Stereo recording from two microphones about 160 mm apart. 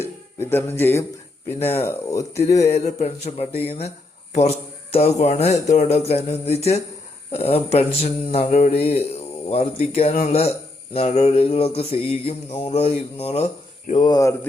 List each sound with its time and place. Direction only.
0.0 s speech: 15° left (ahead or behind)
2.6 s speech: 45° left (ahead or behind)
3.7 s mantra: 40° left (ahead or behind)
14.0 s speech: 25° left (ahead or behind)